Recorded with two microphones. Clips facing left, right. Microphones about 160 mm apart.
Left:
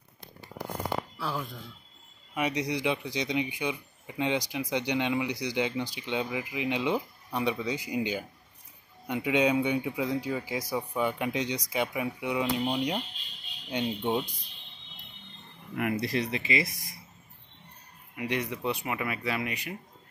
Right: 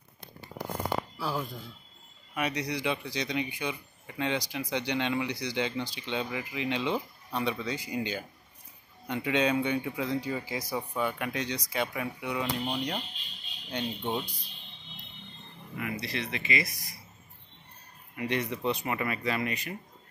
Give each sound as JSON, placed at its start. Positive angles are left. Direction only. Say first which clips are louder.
{"t": 1.1, "sound": "speech", "louder": "right 1 dB", "side_deg": -5}
{"t": 2.3, "sound": "speech", "louder": "left 2 dB", "side_deg": 20}
{"t": 15.7, "sound": "speech", "louder": "left 6 dB", "side_deg": 55}
{"t": 18.1, "sound": "speech", "louder": "even", "side_deg": 10}